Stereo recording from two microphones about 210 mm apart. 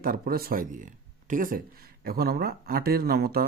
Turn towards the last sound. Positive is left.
turn(degrees=-45)  # may be behind; listen again after turning